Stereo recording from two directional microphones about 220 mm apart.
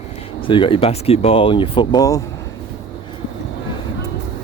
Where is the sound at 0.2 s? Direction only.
25° left (ahead or behind).